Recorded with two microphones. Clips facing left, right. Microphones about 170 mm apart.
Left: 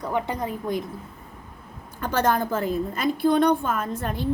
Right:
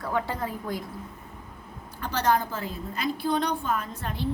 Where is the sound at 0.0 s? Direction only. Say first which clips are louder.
Left 2 dB; 20° left (ahead or behind).